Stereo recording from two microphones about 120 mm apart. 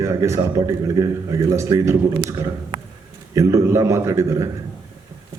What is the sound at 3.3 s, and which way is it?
A man's voice, 25° right (ahead or behind).